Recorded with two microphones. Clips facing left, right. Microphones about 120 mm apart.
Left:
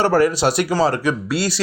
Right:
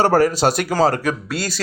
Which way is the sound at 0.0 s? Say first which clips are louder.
Right 1 dB; 40° right (ahead or behind).